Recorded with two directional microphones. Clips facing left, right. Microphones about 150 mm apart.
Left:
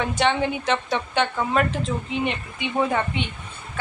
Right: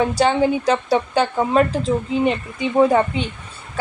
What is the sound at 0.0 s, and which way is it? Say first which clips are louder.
A woman's voice: right 5 dB; 35° right (ahead or behind).